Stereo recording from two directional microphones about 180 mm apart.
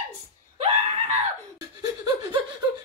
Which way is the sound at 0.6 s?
35° right (ahead or behind).